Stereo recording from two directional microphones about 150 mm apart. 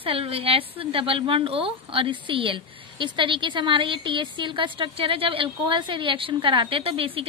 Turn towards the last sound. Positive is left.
turn(degrees=-40)  # may be behind; listen again after turning